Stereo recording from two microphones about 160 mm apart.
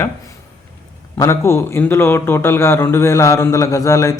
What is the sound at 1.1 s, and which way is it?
A man's voice, 15° left (ahead or behind).